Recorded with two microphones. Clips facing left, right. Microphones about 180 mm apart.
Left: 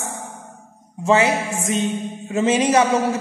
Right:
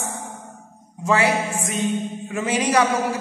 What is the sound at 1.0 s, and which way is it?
A man's voice, 25° left (ahead or behind).